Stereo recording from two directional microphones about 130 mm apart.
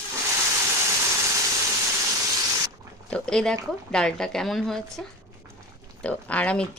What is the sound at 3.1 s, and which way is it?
Speech, 5° left (ahead or behind).